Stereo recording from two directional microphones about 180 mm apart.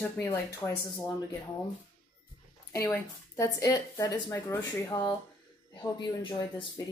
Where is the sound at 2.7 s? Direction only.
15° left (ahead or behind).